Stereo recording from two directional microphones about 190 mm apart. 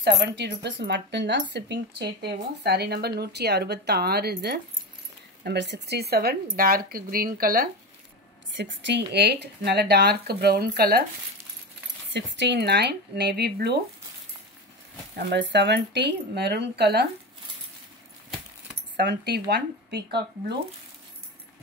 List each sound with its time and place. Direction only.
0.0 s speech: 65° right (ahead or behind); by 7.7 s 50° right (ahead or behind)
8.5 s speech: 70° right (ahead or behind); by 11.1 s 55° right (ahead or behind)
12.1 s speech: 70° right (ahead or behind)
15.1 s speech: 70° right (ahead or behind)
18.9 s speech: 60° right (ahead or behind)